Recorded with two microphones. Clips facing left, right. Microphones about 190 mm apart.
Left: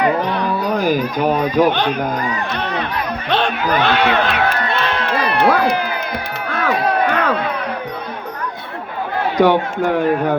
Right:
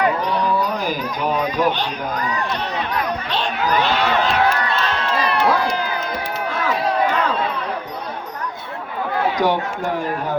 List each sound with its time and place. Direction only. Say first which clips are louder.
0.2 s speech: left 1 dB; 55° left (ahead or behind)
6.5 s a sound: left 4 dB; 60° left (ahead or behind)
9.4 s speech: left 6 dB; 60° left (ahead or behind)